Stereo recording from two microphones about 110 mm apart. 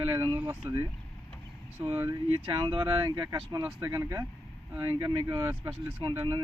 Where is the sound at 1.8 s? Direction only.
50° right (ahead or behind).